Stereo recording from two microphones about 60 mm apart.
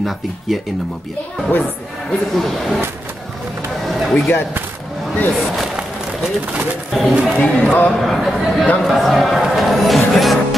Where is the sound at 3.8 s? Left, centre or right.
Centre.